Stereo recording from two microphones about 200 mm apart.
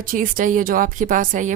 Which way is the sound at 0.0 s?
45° right (ahead or behind).